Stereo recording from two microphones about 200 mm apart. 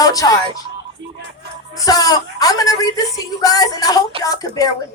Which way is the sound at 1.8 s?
20° left (ahead or behind).